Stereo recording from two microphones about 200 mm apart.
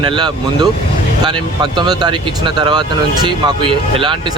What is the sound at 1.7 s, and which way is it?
Speech, 20° right (ahead or behind).